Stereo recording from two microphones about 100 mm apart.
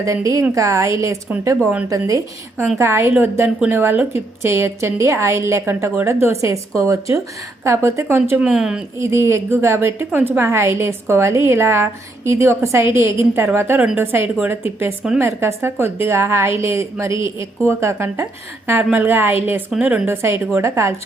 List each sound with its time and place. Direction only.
0.0 s a woman's voice: 30° right (ahead or behind)
8.4 s speech: 5° right (ahead or behind)
9.0 s a woman's voice: 30° right (ahead or behind)